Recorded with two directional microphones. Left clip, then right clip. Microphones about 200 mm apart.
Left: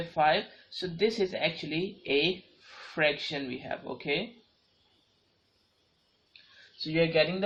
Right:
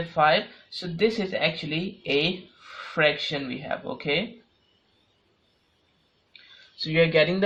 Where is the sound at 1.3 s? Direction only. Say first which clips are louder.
Right 5 dB; 35° right (ahead or behind).